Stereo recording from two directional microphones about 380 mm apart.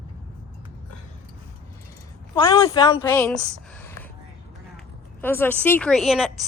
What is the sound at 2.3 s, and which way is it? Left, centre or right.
A woman's voice, centre.